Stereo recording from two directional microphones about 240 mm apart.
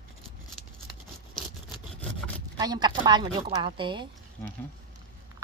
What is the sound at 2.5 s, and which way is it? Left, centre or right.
A woman's voice, centre.